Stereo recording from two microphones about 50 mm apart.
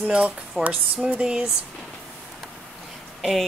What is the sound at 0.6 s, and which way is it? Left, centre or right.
Speech, centre.